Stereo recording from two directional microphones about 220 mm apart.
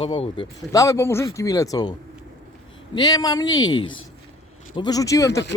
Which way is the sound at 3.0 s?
15° left (ahead or behind).